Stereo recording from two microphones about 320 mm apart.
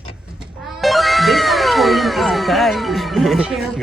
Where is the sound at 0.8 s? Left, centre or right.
Centre.